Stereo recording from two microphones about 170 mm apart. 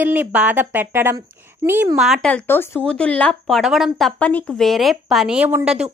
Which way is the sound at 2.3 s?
10° left (ahead or behind).